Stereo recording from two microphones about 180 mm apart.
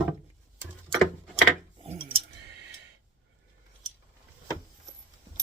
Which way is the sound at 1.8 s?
30° right (ahead or behind).